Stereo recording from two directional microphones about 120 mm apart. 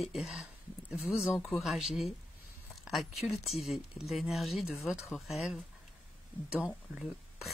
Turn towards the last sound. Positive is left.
turn(degrees=0)  # may be behind; listen again after turning